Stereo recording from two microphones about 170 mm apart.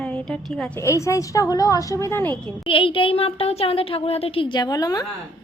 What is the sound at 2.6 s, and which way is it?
Speech, 30° left (ahead or behind).